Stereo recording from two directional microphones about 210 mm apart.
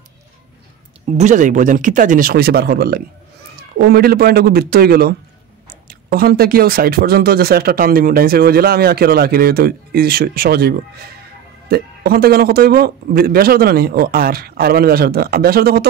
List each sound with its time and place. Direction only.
1.1 s speech: 35° right (ahead or behind)